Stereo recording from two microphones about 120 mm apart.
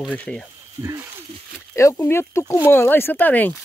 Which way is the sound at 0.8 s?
20° right (ahead or behind).